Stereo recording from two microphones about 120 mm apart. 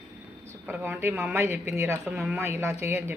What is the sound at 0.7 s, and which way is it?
Speech, 15° right (ahead or behind).